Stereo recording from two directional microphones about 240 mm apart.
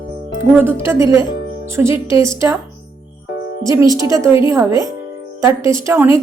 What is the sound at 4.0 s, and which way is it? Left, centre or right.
A woman's voice, centre.